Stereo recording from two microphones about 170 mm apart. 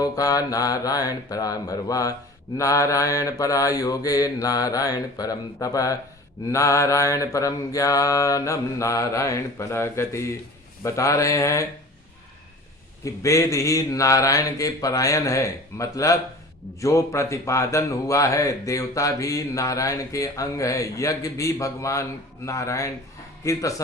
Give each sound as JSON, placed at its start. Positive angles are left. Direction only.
{"t": 0.0, "sound": "a man's voice", "side_deg": 20}
{"t": 6.5, "sound": "mantra", "side_deg": 20}
{"t": 10.8, "sound": "a man's voice", "side_deg": 20}
{"t": 13.1, "sound": "a man's voice", "side_deg": 20}
{"t": 22.4, "sound": "mantra", "side_deg": 20}
{"t": 23.4, "sound": "a man's voice", "side_deg": 20}